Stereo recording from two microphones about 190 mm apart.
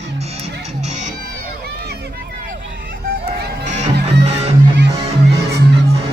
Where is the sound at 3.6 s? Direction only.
40° right (ahead or behind).